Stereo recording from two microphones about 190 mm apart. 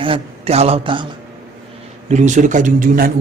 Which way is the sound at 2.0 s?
40° right (ahead or behind).